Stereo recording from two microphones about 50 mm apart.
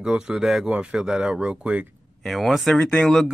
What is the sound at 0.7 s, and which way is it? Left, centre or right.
Speech, right.